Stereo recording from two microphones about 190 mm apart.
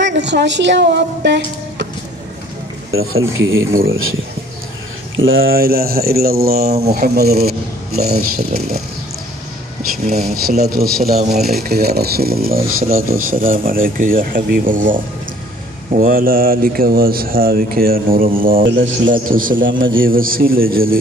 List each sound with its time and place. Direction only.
0.0 s a woman's voice: 65° right (ahead or behind)
2.9 s speech: 90° right
5.5 s speech: 50° right (ahead or behind)
10.0 s speech: 35° right (ahead or behind)
10.6 s speech: 50° right (ahead or behind)
18.6 s speech: 80° right
19.2 s speech: 45° right (ahead or behind)